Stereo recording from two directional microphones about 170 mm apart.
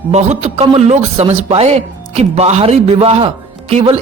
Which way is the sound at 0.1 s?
40° right (ahead or behind).